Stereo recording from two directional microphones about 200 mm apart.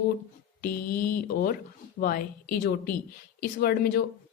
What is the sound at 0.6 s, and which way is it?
A woman's voice, 50° left (ahead or behind).